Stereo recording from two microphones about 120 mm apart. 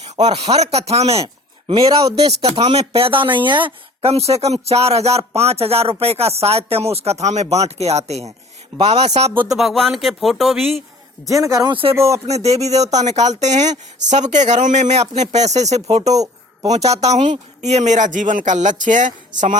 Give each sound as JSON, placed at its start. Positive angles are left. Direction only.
{"t": 0.0, "sound": "speech", "side_deg": -60}
{"t": 4.1, "sound": "speech", "side_deg": -60}
{"t": 9.5, "sound": "speech", "side_deg": 0}
{"t": 11.3, "sound": "speech", "side_deg": -25}
{"t": 11.7, "sound": "speech", "side_deg": -50}
{"t": 12.2, "sound": "speech", "side_deg": -60}
{"t": 13.4, "sound": "a man's voice", "side_deg": -75}
{"t": 16.1, "sound": "a sound", "side_deg": -30}
{"t": 16.7, "sound": "speech", "side_deg": -65}